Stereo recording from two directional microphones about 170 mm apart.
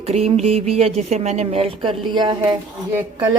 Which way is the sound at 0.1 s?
40° right (ahead or behind).